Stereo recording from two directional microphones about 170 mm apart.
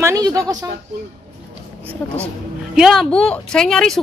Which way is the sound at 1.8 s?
10° right (ahead or behind).